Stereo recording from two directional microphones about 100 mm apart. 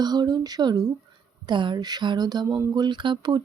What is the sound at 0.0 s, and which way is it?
Speech, 45° right (ahead or behind).